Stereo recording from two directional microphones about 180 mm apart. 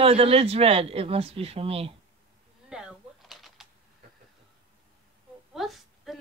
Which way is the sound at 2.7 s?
5° right (ahead or behind).